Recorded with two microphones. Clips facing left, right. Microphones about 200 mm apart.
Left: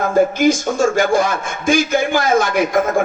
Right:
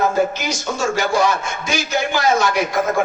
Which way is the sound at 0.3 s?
50° left (ahead or behind).